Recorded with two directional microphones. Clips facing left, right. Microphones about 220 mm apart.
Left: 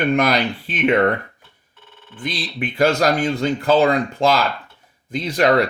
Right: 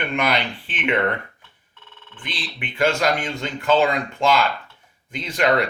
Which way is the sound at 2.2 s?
40° left (ahead or behind).